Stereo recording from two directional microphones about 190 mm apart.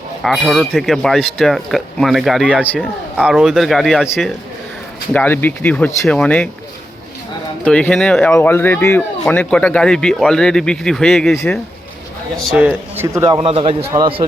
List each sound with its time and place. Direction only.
0.2 s speech: centre (ahead or behind)
5.1 s speech: 10° left (ahead or behind)
7.6 s a man's voice: 5° left (ahead or behind); by 13.5 s 20° right (ahead or behind)
13.5 s a man's voice: 30° right (ahead or behind)